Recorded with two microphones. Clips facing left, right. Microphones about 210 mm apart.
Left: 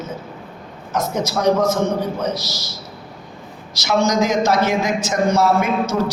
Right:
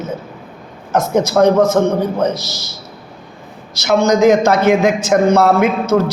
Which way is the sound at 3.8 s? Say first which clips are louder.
Right 6 dB; 55° right (ahead or behind).